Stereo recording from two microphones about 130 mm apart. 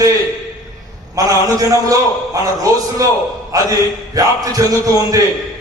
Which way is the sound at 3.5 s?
25° right (ahead or behind).